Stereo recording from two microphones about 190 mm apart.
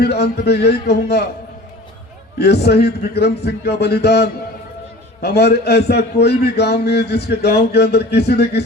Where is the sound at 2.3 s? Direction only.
60° left (ahead or behind).